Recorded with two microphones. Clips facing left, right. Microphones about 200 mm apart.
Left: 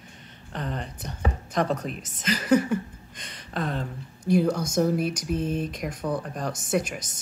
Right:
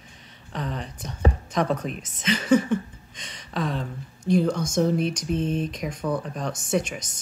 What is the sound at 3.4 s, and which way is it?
Speech, 55° left (ahead or behind).